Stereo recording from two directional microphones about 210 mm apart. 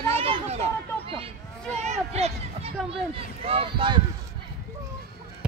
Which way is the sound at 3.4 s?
25° right (ahead or behind).